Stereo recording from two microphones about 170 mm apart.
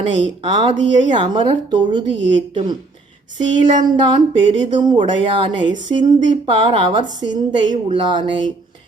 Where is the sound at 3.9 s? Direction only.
25° right (ahead or behind).